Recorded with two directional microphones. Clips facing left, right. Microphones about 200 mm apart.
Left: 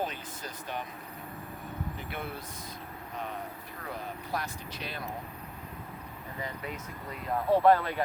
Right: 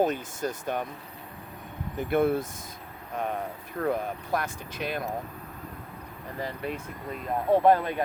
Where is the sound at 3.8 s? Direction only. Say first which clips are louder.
Right 11 dB; 50° right (ahead or behind).